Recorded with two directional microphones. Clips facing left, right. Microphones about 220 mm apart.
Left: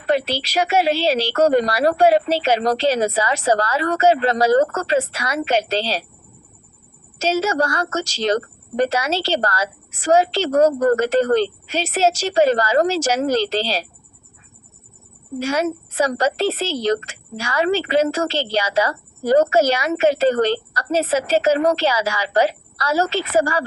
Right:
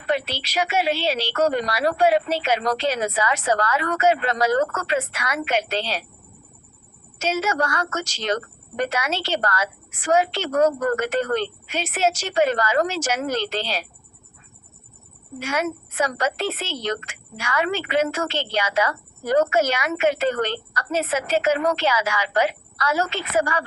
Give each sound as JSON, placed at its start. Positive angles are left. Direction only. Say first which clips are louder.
{"t": 0.1, "sound": "speech", "louder": "left 5 dB", "side_deg": 35}
{"t": 7.2, "sound": "speech", "louder": "left 4 dB", "side_deg": 30}
{"t": 15.4, "sound": "speech", "louder": "left 5 dB", "side_deg": 35}